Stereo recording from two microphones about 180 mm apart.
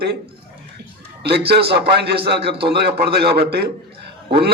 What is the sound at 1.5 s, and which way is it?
Speech, 60° right (ahead or behind).